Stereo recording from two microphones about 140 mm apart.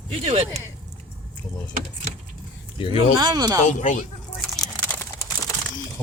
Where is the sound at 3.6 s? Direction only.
65° left (ahead or behind).